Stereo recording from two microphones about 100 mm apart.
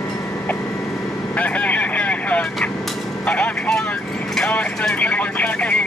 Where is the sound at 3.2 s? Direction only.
15° left (ahead or behind).